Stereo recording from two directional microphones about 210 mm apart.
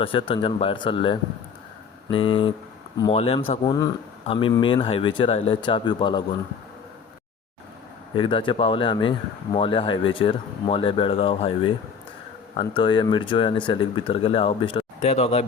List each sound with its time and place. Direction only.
0.0 s speech: 25° left (ahead or behind)
8.1 s speech: 25° left (ahead or behind)